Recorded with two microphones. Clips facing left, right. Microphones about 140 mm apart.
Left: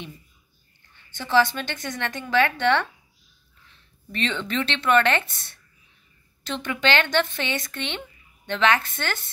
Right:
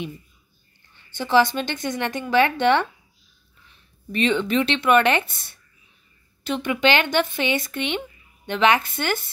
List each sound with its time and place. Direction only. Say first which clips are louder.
1.1 s speech: right 2 dB; 15° right (ahead or behind)